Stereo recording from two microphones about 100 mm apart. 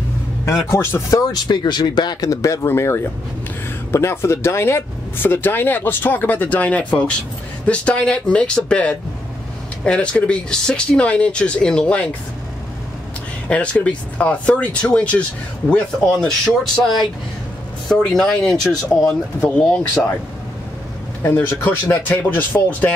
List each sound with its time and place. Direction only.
0.5 s speech: 25° left (ahead or behind)
1.3 s speech: 45° left (ahead or behind); by 12.2 s 10° left (ahead or behind)
13.5 s speech: 15° left (ahead or behind)
17.8 s speech: 5° left (ahead or behind)
18.6 s speech: 35° left (ahead or behind)
19.4 s speech: 10° left (ahead or behind)
21.2 s speech: 20° left (ahead or behind)